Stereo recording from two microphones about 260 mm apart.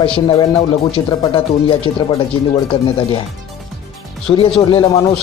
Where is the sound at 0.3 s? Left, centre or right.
Centre.